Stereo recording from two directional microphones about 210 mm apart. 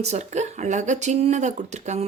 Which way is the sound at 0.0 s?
30° right (ahead or behind).